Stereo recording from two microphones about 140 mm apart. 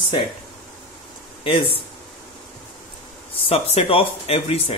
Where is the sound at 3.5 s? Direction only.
40° left (ahead or behind).